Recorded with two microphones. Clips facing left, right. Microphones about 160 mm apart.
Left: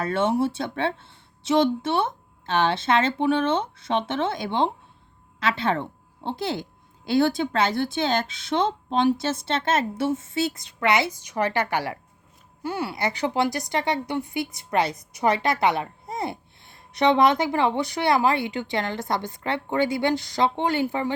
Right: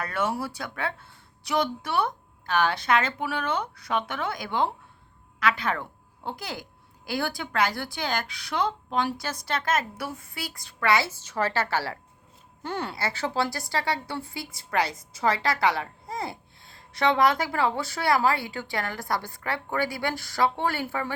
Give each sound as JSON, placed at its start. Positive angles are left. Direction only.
{"t": 0.0, "sound": "a woman's voice", "side_deg": 25}